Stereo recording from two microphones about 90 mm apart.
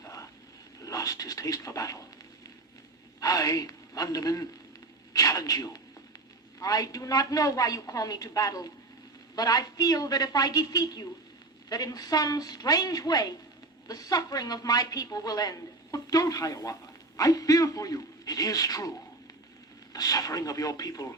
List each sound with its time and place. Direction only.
0.8 s speech: 40° left (ahead or behind)
3.2 s a man's voice: 40° left (ahead or behind)
19.9 s a woman's voice: 45° left (ahead or behind)